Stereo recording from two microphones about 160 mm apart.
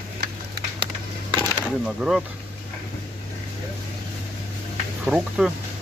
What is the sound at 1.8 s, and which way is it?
Speech, 5° right (ahead or behind).